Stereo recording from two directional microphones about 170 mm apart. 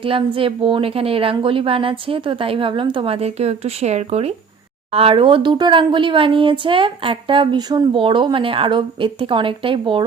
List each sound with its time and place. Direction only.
0.0 s speech: 30° right (ahead or behind)